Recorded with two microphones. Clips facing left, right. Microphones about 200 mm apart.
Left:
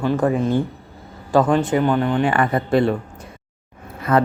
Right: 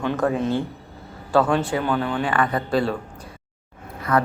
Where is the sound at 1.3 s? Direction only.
15° left (ahead or behind).